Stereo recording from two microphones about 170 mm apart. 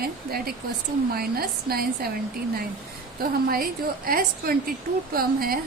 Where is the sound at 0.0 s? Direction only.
65° right (ahead or behind).